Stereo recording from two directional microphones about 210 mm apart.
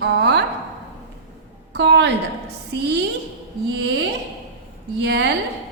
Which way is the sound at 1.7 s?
55° right (ahead or behind).